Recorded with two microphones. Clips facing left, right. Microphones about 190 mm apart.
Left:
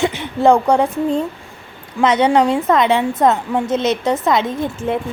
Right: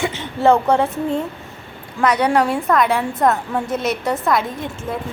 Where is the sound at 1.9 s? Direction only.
20° left (ahead or behind).